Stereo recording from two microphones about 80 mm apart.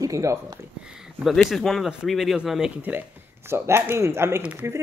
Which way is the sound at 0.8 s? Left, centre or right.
Centre.